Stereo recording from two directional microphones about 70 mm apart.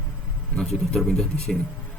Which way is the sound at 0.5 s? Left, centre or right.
Centre.